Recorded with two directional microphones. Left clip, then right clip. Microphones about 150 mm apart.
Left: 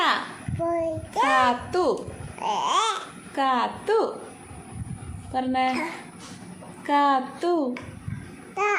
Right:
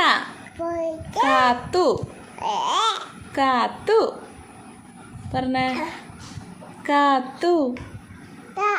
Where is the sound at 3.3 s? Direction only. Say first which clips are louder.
Right 3 dB; 40° right (ahead or behind).